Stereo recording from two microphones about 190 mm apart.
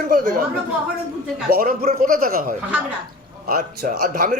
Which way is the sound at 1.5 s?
50° right (ahead or behind).